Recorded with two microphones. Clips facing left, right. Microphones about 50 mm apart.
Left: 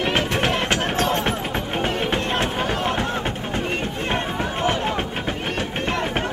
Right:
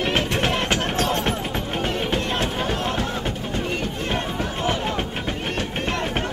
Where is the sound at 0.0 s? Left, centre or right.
Centre.